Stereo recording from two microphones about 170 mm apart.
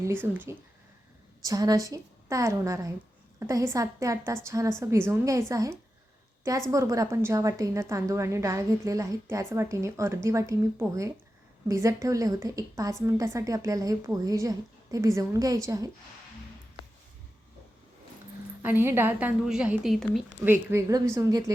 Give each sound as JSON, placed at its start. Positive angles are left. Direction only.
{"t": 0.0, "sound": "a woman's voice", "side_deg": -15}
{"t": 18.6, "sound": "a woman's voice", "side_deg": -10}
{"t": 20.5, "sound": "a woman's voice", "side_deg": -15}